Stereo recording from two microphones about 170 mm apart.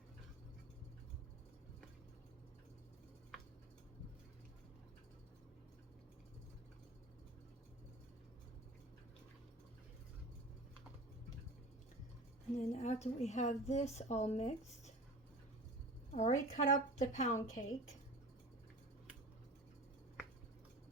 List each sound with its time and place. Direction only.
12.5 s a woman's voice: 45° left (ahead or behind)
16.1 s a woman's voice: 45° left (ahead or behind)